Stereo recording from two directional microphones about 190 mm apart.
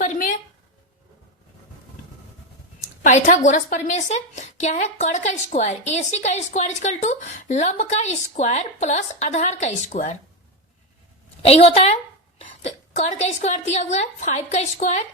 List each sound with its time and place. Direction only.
0.0 s a sound: 40° left (ahead or behind)
3.0 s a woman's voice: 40° left (ahead or behind)
11.4 s a woman's voice: 30° left (ahead or behind)